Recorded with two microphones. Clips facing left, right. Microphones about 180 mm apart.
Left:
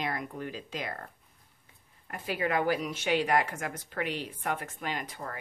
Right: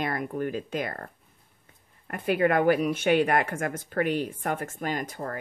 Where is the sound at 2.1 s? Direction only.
55° right (ahead or behind).